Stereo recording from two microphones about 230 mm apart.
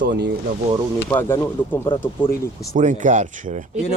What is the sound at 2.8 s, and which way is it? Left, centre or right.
Speech, right.